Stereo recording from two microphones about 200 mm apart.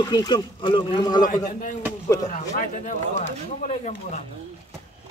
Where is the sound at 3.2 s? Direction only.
35° left (ahead or behind).